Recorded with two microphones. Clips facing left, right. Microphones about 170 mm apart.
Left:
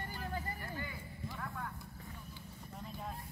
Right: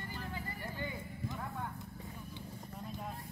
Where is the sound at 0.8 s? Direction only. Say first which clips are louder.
Right 4 dB; 20° right (ahead or behind).